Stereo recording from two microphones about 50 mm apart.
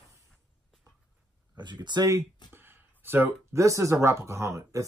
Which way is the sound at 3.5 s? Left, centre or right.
Right.